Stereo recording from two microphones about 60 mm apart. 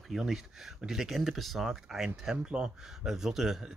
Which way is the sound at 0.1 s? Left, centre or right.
Centre.